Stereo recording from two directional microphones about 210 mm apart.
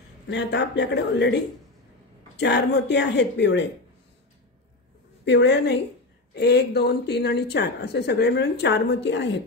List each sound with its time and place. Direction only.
0.3 s speech: 55° left (ahead or behind)
5.2 s speech: 55° left (ahead or behind)